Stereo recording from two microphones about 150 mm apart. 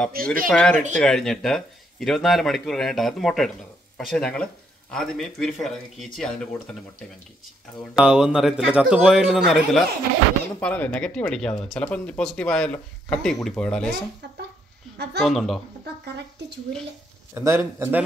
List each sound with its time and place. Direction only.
0.1 s speech: 75° right (ahead or behind)
0.5 s speech: 5° left (ahead or behind)
7.9 s speech: 5° right (ahead or behind)
10.6 s speech: 10° left (ahead or behind)
15.1 s speech: centre (ahead or behind)
17.3 s a man's voice: 15° right (ahead or behind)